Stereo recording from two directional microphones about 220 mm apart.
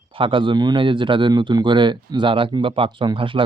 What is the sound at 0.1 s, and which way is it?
Speech, 25° right (ahead or behind).